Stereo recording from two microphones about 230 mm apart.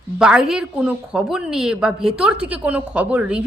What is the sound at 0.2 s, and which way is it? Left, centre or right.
Speech, centre.